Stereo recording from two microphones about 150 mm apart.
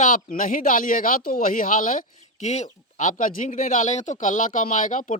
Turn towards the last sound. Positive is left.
turn(degrees=55)  # may be behind; listen again after turning